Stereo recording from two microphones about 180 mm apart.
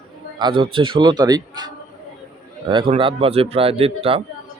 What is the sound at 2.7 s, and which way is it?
Speech, 30° right (ahead or behind).